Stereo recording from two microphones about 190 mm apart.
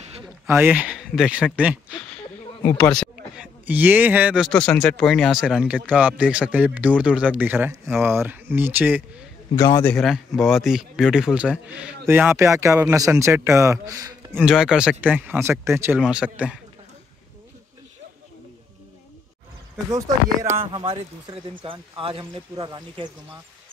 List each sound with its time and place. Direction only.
0.5 s speech: 10° right (ahead or behind)
2.6 s speech: 15° left (ahead or behind)
2.9 s a man's voice: centre (ahead or behind)
4.5 s speech: 5° left (ahead or behind); by 9.0 s 10° right (ahead or behind)
9.6 s a man's voice: 20° left (ahead or behind)
9.8 s speech: centre (ahead or behind); by 14.3 s 20° right (ahead or behind)
14.3 s speech: centre (ahead or behind)
20.7 s speech: 25° right (ahead or behind)